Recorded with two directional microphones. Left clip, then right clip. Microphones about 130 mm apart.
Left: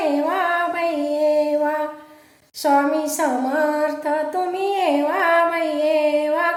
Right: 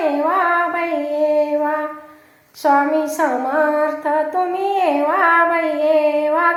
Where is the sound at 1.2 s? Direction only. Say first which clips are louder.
Right 2 dB; 25° left (ahead or behind).